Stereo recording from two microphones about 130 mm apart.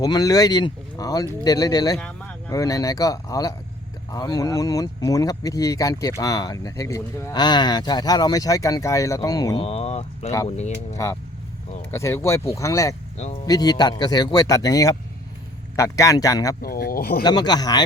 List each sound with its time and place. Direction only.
0.0 s speech: 25° left (ahead or behind)
2.0 s vehicle: 10° left (ahead or behind)
2.5 s speech: 25° left (ahead or behind)
9.6 s speech: 50° left (ahead or behind)
10.9 s speech: 25° left (ahead or behind)